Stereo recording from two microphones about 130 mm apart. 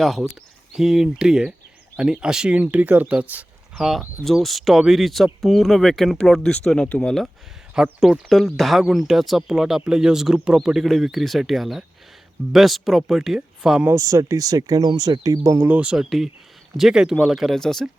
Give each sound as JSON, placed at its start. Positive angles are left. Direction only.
{"t": 0.0, "sound": "speech", "side_deg": 0}
{"t": 13.8, "sound": "speech", "side_deg": -25}